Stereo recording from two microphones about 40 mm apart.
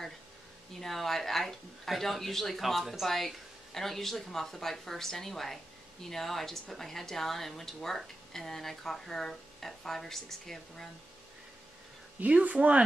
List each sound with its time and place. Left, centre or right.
0.7 s a woman's voice: centre
12.2 s speech: right